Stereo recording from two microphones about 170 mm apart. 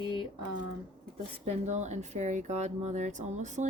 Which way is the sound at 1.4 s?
40° right (ahead or behind).